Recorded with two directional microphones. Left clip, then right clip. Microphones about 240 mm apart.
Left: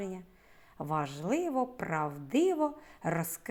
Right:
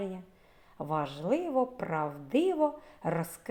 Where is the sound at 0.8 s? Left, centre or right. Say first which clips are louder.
Right 1 dB; left.